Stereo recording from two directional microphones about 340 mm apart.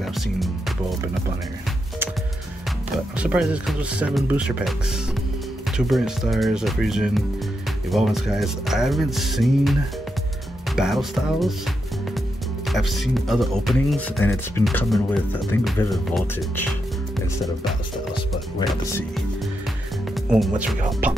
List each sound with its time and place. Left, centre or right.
0.0 s speech: centre
3.2 s speech: centre
5.8 s speech: centre
10.8 s speech: centre
12.6 s speech: centre
18.7 s speech: centre
20.2 s speech: centre